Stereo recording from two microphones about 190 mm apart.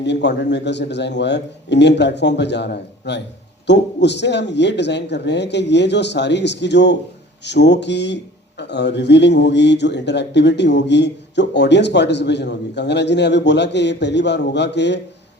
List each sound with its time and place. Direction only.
0.0 s speech: 65° left (ahead or behind)